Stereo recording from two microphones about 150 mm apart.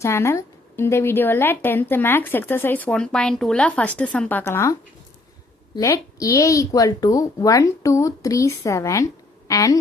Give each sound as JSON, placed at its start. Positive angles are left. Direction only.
{"t": 0.0, "sound": "a woman's voice", "side_deg": 20}